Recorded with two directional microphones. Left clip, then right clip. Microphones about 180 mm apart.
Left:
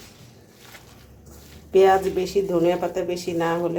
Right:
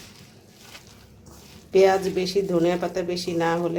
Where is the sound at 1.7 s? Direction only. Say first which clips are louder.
Left 2 dB; 5° left (ahead or behind).